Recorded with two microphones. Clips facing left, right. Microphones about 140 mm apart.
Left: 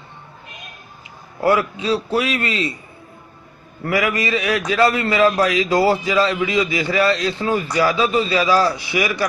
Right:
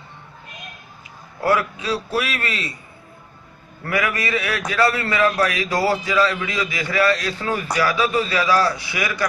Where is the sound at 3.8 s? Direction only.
20° left (ahead or behind).